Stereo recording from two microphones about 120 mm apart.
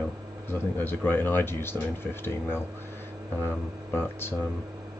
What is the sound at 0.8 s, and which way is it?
Speech, 15° left (ahead or behind).